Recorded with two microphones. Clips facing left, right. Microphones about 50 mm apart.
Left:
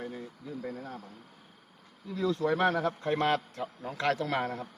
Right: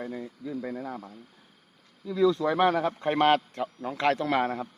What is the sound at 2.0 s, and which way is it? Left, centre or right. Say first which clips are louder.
A man's voice: right 5 dB; right.